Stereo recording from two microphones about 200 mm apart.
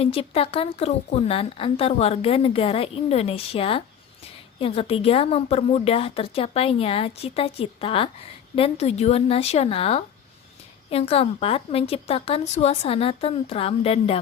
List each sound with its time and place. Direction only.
0.0 s a woman's voice: 30° left (ahead or behind)